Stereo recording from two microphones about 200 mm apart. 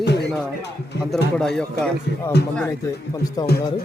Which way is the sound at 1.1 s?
Centre (ahead or behind).